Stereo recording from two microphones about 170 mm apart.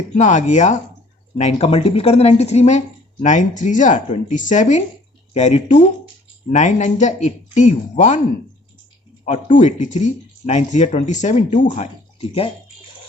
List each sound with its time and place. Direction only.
0.2 s a woman's voice: 45° left (ahead or behind)
9.2 s a woman's voice: 45° left (ahead or behind)